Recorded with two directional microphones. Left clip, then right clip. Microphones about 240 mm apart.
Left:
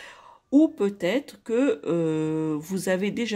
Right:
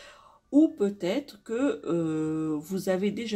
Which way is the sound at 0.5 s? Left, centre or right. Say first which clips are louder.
Left 2 dB; left.